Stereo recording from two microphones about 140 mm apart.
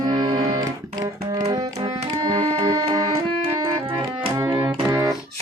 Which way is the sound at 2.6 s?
25° right (ahead or behind).